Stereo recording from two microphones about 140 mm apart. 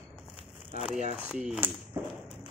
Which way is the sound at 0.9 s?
55° right (ahead or behind).